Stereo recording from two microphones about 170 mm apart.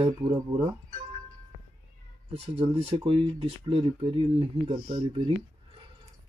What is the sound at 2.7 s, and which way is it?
Speech, 35° right (ahead or behind).